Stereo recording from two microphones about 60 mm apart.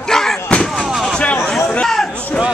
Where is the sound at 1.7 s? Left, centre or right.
Centre.